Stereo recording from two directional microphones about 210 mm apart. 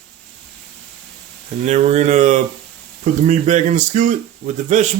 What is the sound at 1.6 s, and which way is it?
Speech, 35° right (ahead or behind).